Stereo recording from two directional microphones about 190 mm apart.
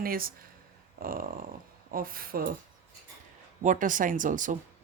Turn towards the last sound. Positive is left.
turn(degrees=-45)  # may be behind; listen again after turning